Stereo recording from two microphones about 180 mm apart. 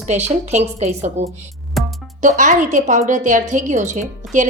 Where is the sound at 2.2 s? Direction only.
45° right (ahead or behind).